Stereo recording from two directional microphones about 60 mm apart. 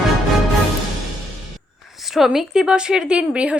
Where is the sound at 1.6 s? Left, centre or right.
Centre.